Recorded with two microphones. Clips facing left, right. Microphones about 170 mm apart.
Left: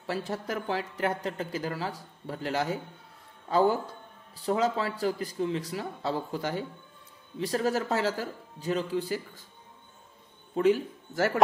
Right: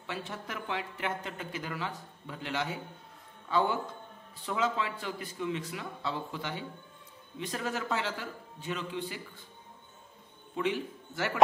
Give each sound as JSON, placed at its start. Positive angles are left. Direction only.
{"t": 0.0, "sound": "speech", "side_deg": 40}
{"t": 10.5, "sound": "speech", "side_deg": 40}